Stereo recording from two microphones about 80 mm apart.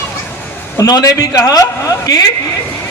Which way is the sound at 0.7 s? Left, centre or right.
Left.